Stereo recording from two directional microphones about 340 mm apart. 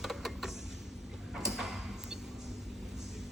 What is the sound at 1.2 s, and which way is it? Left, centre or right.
Sliding door, centre.